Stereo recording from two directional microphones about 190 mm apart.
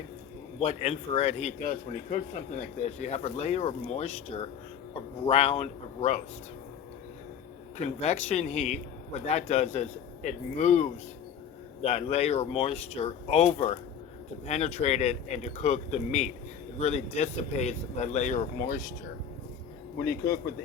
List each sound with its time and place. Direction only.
0.6 s a man's voice: 30° left (ahead or behind)
7.8 s a man's voice: 35° left (ahead or behind)
20.1 s speech: 55° left (ahead or behind)